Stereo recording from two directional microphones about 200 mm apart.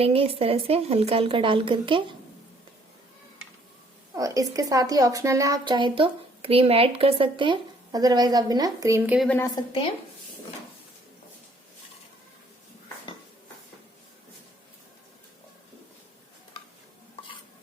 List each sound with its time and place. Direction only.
0.0 s a woman's voice: 30° right (ahead or behind)
4.1 s a woman's voice: 15° right (ahead or behind)